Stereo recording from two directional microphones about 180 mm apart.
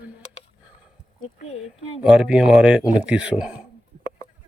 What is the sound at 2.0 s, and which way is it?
Speech, 5° right (ahead or behind).